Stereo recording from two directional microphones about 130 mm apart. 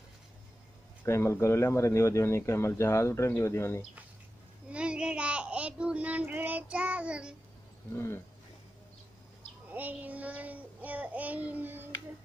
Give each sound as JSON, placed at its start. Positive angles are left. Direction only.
{"t": 1.0, "sound": "speech", "side_deg": 20}
{"t": 4.6, "sound": "speech", "side_deg": -10}
{"t": 7.9, "sound": "speech", "side_deg": 15}
{"t": 9.7, "sound": "child singing", "side_deg": -10}